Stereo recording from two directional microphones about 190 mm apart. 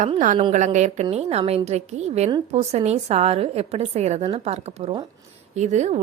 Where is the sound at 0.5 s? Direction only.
40° right (ahead or behind).